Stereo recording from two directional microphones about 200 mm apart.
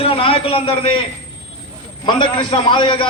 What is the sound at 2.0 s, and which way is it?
A man's voice, 25° left (ahead or behind).